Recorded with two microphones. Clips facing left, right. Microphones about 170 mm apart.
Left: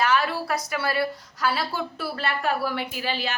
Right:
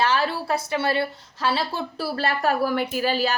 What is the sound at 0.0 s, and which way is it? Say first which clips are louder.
A woman's voice: right 1 dB; 30° right (ahead or behind).